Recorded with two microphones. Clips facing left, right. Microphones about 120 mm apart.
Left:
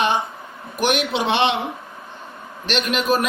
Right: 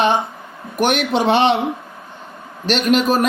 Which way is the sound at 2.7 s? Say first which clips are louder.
Right 5 dB; 40° right (ahead or behind).